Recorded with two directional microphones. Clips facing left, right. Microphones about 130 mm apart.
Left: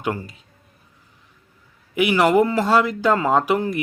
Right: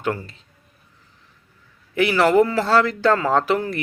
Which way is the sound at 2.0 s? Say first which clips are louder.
Even; 15° left (ahead or behind).